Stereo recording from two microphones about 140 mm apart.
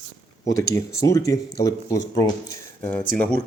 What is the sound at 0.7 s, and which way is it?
Speech, 25° left (ahead or behind).